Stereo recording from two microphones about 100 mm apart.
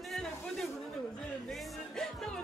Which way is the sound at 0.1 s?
5° left (ahead or behind).